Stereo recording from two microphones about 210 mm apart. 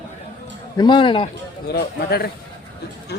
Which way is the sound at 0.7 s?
20° left (ahead or behind).